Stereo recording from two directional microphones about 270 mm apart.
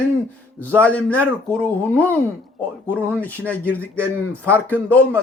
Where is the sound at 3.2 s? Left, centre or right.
Centre.